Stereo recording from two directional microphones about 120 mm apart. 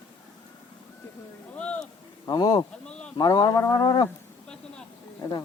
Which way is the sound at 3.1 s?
35° left (ahead or behind).